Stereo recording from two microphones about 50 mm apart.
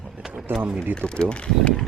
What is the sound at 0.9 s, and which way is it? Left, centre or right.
Speech, centre.